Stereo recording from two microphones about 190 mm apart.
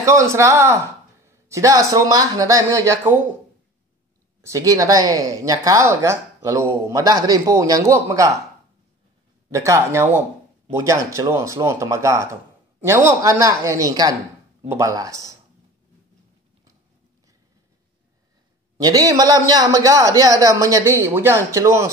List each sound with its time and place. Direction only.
0.0 s speech: 15° right (ahead or behind)
4.4 s speech: 15° right (ahead or behind)
9.5 s speech: 15° right (ahead or behind)
18.8 s speech: 20° right (ahead or behind)